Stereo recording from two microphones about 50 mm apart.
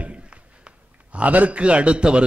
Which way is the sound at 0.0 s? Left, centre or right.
Right.